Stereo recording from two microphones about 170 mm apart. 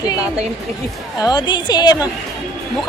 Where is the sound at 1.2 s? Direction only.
25° left (ahead or behind).